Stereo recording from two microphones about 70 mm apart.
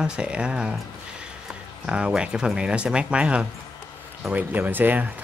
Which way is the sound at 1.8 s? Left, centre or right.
Centre.